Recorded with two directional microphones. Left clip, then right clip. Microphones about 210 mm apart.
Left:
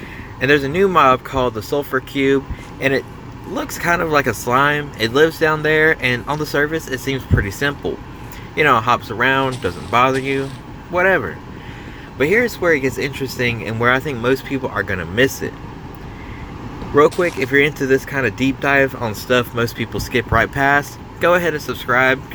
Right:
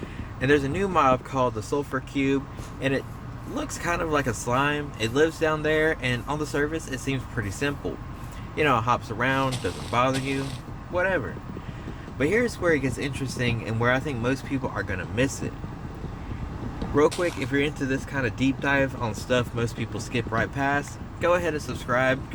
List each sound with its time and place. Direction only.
0.3 s speech: 15° left (ahead or behind)
3.5 s speech: 20° left (ahead or behind)
12.2 s speech: 15° left (ahead or behind)
17.4 s speech: 25° left (ahead or behind)